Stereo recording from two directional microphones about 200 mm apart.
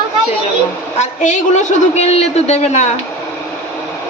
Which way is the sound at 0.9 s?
35° left (ahead or behind).